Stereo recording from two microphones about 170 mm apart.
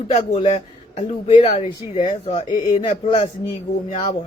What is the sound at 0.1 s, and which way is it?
A man's voice, 35° left (ahead or behind).